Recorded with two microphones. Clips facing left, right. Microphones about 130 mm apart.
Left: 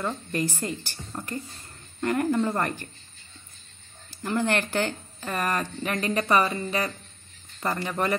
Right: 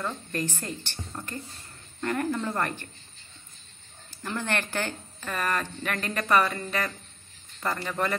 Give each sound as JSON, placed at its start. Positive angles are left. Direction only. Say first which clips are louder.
{"t": 0.0, "sound": "speech", "louder": "left 3 dB", "side_deg": 10}
{"t": 4.1, "sound": "speech", "louder": "left 5 dB", "side_deg": 15}